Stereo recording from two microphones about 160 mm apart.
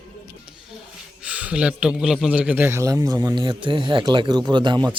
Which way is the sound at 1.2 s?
10° right (ahead or behind).